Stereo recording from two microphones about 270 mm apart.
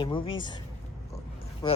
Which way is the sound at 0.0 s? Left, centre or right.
Centre.